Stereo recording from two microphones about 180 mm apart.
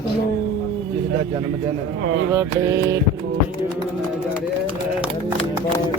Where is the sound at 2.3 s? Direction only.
15° right (ahead or behind).